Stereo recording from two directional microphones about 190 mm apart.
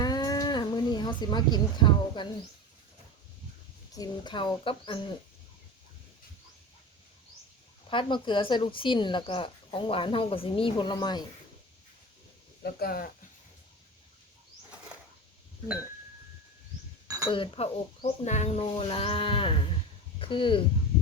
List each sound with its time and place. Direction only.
0.0 s a sound: 20° left (ahead or behind)
3.9 s speech: 20° left (ahead or behind)
7.9 s speech: 25° left (ahead or behind)
12.6 s speech: 55° left (ahead or behind)
17.2 s speech: 25° left (ahead or behind)